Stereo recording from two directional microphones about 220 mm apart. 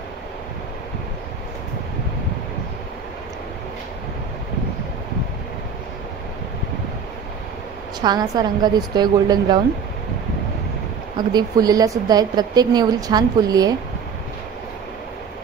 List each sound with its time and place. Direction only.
8.0 s a woman's voice: 20° right (ahead or behind)
11.1 s a woman's voice: 20° right (ahead or behind)